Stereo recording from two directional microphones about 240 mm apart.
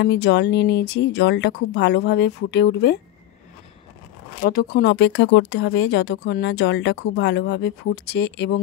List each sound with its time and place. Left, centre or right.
0.0 s speech: left
4.4 s speech: left